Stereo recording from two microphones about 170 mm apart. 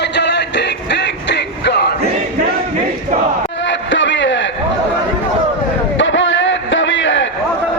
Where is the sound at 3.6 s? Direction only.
90° left.